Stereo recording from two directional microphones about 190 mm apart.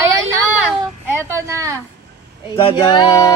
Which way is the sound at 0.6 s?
10° right (ahead or behind).